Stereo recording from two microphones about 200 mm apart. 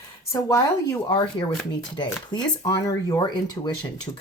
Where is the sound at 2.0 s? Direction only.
20° left (ahead or behind).